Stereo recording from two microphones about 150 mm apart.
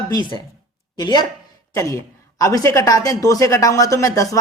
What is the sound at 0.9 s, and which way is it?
Speech, 30° left (ahead or behind).